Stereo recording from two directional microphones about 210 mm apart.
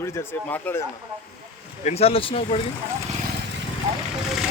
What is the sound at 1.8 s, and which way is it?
Speech, 30° left (ahead or behind).